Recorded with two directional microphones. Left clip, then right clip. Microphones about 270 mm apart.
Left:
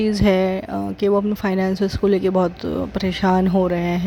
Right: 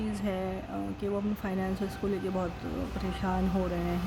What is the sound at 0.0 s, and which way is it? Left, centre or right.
Speech, left.